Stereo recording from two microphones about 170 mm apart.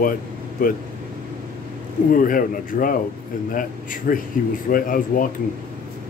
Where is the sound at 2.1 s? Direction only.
55° left (ahead or behind).